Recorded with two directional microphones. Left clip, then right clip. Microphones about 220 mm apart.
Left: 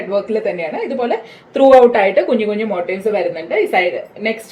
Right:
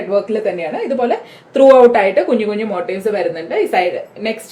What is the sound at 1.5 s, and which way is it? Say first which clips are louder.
A woman's voice: right 1 dB; 20° right (ahead or behind).